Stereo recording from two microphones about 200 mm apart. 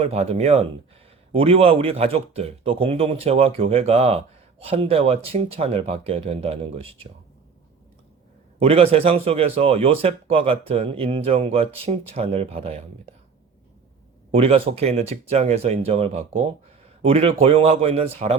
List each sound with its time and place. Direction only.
0.0 s speech: 30° right (ahead or behind)
8.5 s speech: 30° right (ahead or behind)
14.3 s speech: 30° right (ahead or behind)